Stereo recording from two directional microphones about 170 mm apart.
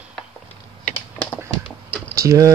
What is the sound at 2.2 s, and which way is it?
Keys jangling, 20° right (ahead or behind).